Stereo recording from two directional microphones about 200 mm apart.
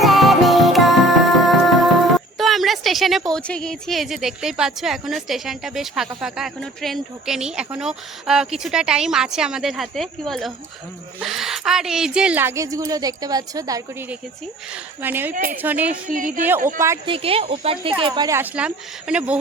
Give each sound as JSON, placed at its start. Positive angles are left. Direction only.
{"t": 0.0, "sound": "music", "side_deg": 0}
{"t": 2.4, "sound": "a woman's voice", "side_deg": 0}
{"t": 15.0, "sound": "a woman's voice", "side_deg": -10}
{"t": 15.3, "sound": "a woman's voice", "side_deg": -45}
{"t": 15.6, "sound": "a woman's voice", "side_deg": -10}
{"t": 16.0, "sound": "a woman's voice", "side_deg": -40}
{"t": 17.1, "sound": "a woman's voice", "side_deg": -30}